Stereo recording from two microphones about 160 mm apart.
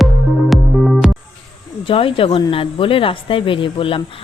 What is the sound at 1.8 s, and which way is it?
Speech, 35° left (ahead or behind).